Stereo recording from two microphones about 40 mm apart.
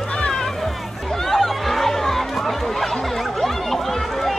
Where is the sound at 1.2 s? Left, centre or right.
Centre.